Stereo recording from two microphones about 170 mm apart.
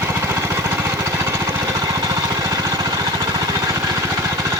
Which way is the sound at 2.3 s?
20° right (ahead or behind).